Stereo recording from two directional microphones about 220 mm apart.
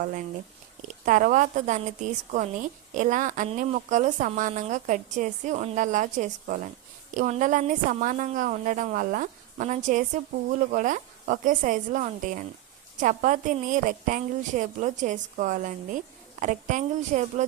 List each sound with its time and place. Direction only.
0.0 s a woman's voice: 35° right (ahead or behind)